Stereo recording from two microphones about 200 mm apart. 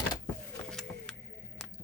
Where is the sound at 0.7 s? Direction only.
5° left (ahead or behind).